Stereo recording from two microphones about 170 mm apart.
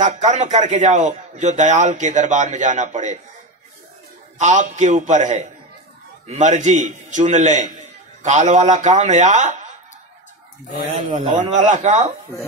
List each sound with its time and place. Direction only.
0.0 s a man's voice: 45° right (ahead or behind)
4.4 s a man's voice: 45° right (ahead or behind)
11.1 s a man's voice: 45° right (ahead or behind)